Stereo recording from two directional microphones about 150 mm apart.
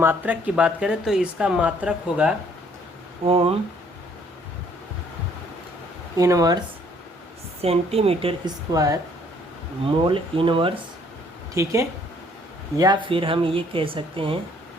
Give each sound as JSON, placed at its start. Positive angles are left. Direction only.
{"t": 0.0, "sound": "speech", "side_deg": -10}
{"t": 3.2, "sound": "speech", "side_deg": -40}
{"t": 6.1, "sound": "speech", "side_deg": -20}
{"t": 7.6, "sound": "speech", "side_deg": -40}
{"t": 8.7, "sound": "speech", "side_deg": -25}
{"t": 9.8, "sound": "speech", "side_deg": -35}
{"t": 11.5, "sound": "speech", "side_deg": -20}
{"t": 13.1, "sound": "speech", "side_deg": -35}